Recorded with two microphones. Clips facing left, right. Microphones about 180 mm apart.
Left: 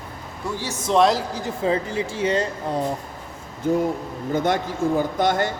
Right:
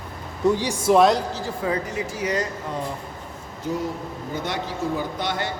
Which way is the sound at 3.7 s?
55° left (ahead or behind).